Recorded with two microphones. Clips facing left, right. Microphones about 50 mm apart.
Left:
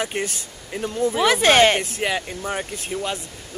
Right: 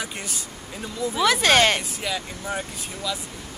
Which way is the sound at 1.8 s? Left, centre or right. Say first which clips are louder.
Left 5 dB; left.